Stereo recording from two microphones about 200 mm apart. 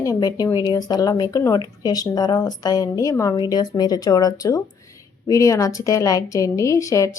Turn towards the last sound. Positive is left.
turn(degrees=15)  # may be behind; listen again after turning